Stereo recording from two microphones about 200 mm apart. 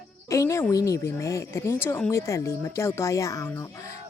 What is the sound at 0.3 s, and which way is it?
Speech, 15° left (ahead or behind).